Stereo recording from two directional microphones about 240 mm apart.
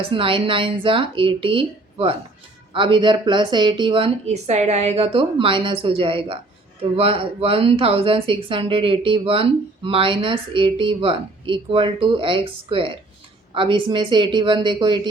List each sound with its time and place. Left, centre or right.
0.0 s speech: right